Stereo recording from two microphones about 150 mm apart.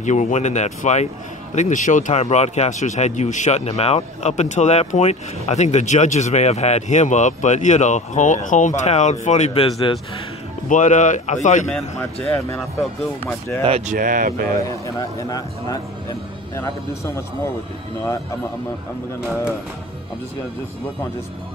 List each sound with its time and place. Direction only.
0.0 s speech: 50° left (ahead or behind)
10.7 s speech: 55° left (ahead or behind)
11.7 s a man's voice: 10° left (ahead or behind)
13.7 s speech: 45° right (ahead or behind)
13.9 s speech: 65° right (ahead or behind)
14.7 s speech: 25° left (ahead or behind)